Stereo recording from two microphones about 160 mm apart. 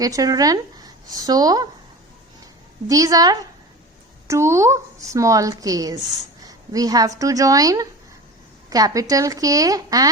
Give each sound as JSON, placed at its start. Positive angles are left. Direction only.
{"t": 0.0, "sound": "speech", "side_deg": -20}
{"t": 2.9, "sound": "a woman's voice", "side_deg": -20}